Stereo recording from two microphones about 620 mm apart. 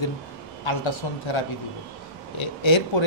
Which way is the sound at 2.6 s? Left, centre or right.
Left.